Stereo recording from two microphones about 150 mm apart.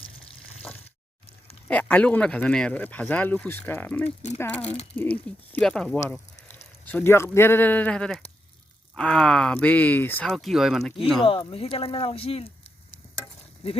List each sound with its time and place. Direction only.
1.6 s speech: 10° left (ahead or behind)
10.2 s speech: centre (ahead or behind)
11.3 s speech: 40° left (ahead or behind)